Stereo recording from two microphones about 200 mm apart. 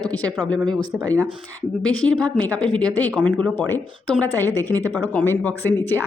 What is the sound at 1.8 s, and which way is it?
A woman's voice, 5° left (ahead or behind).